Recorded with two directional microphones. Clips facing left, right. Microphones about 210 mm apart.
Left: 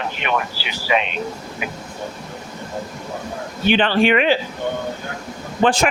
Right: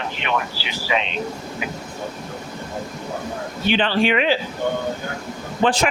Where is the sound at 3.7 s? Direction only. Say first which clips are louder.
Left 3 dB; 55° left (ahead or behind).